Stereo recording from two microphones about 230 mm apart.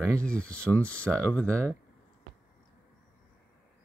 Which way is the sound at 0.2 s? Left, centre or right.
Centre.